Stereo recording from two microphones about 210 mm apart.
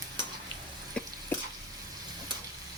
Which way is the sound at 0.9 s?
5° left (ahead or behind).